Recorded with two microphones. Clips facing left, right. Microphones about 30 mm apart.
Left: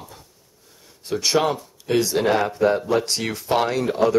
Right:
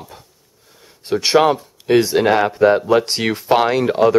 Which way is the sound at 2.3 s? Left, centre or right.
Centre.